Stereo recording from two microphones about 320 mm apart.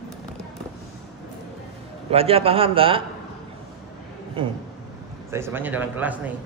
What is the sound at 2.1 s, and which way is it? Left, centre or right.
Speech, centre.